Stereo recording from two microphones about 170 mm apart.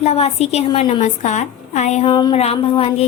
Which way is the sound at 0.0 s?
35° left (ahead or behind).